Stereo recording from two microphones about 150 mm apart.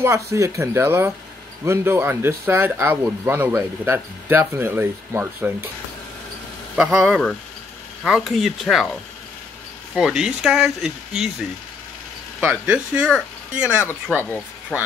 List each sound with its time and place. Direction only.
0.0 s speech: 20° right (ahead or behind)
6.7 s speech: centre (ahead or behind)
9.9 s speech: centre (ahead or behind)
12.4 s speech: 10° right (ahead or behind)
14.7 s speech: 10° left (ahead or behind)